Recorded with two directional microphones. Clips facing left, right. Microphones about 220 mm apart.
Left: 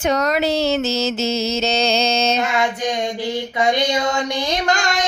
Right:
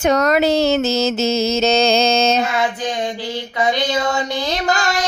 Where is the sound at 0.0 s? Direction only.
45° right (ahead or behind).